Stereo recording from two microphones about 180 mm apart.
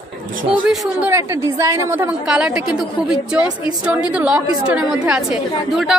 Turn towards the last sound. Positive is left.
turn(degrees=0)  # may be behind; listen again after turning